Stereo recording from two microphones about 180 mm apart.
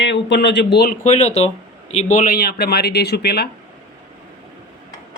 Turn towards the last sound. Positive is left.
turn(degrees=65)  # may be behind; listen again after turning